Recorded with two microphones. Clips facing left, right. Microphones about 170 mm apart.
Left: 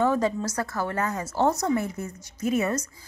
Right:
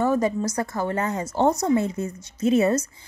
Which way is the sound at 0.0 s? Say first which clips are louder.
Right 2 dB; 10° right (ahead or behind).